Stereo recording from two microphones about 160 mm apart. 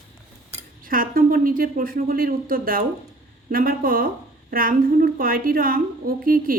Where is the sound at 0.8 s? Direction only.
60° right (ahead or behind).